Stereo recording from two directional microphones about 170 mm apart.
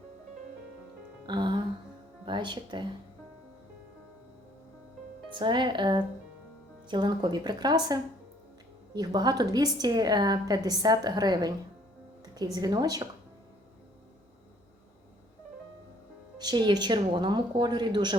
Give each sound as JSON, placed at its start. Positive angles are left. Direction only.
{"t": 1.3, "sound": "music", "side_deg": -25}
{"t": 2.2, "sound": "a woman's voice", "side_deg": -30}
{"t": 5.3, "sound": "a woman's voice", "side_deg": -30}
{"t": 12.2, "sound": "music", "side_deg": -25}
{"t": 12.5, "sound": "a woman's voice", "side_deg": -25}
{"t": 16.4, "sound": "a woman's voice", "side_deg": -25}